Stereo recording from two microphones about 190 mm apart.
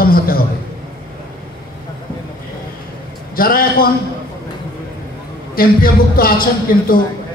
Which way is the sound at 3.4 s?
50° left (ahead or behind).